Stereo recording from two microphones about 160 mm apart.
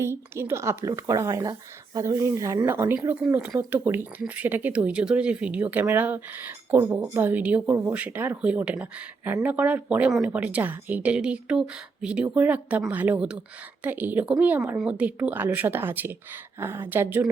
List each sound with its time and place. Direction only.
0.0 s speech: 15° right (ahead or behind)